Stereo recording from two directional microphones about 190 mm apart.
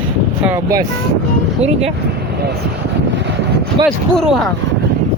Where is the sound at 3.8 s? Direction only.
25° right (ahead or behind).